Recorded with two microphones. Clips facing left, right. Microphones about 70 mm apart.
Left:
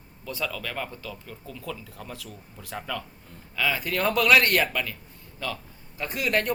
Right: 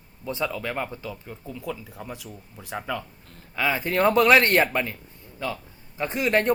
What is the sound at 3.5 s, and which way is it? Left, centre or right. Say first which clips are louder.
Speech: right 3 dB; right.